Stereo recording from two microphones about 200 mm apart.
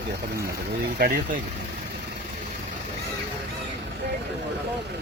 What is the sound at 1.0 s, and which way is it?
Speech, 45° right (ahead or behind).